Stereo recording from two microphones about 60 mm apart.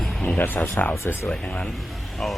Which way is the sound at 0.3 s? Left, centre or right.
Left.